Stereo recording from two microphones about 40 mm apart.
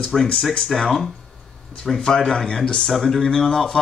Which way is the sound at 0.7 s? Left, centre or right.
Centre.